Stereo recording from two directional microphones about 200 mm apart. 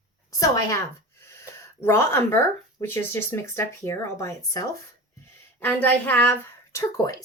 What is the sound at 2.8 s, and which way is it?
Speech, 10° left (ahead or behind).